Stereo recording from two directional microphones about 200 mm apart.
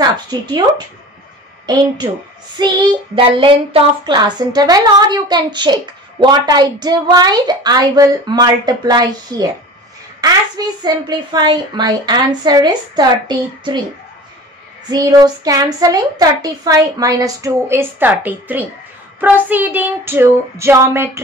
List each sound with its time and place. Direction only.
0.0 s a woman's voice: 20° right (ahead or behind)
2.6 s a woman's voice: 20° right (ahead or behind)
14.9 s a child's voice: 20° right (ahead or behind)